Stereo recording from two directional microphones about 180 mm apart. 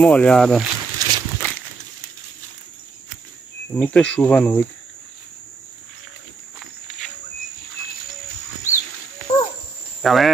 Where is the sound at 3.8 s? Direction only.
5° left (ahead or behind).